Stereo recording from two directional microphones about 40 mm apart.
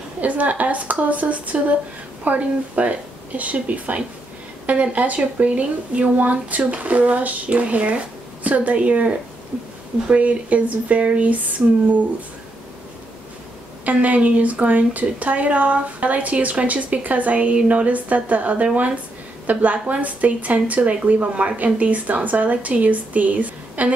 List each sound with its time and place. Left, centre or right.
0.2 s a woman's voice: right
13.8 s a woman's voice: right